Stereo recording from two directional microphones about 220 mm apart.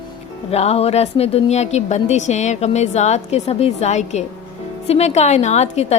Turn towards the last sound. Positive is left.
turn(degrees=30)  # may be behind; listen again after turning